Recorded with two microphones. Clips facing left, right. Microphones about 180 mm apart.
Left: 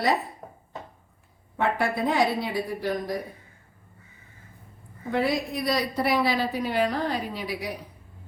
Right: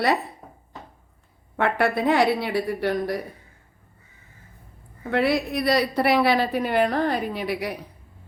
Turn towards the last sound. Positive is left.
turn(degrees=-60)  # may be behind; listen again after turning